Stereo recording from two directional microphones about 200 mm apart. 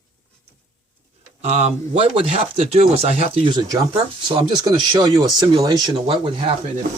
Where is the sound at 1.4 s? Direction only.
30° right (ahead or behind).